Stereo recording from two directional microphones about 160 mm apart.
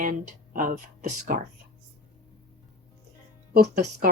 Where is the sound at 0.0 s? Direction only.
60° right (ahead or behind).